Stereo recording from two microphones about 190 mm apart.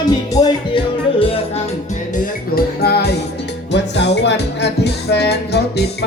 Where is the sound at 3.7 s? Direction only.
65° left (ahead or behind).